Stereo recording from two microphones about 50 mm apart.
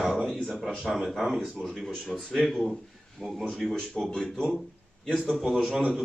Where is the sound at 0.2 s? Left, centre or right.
Centre.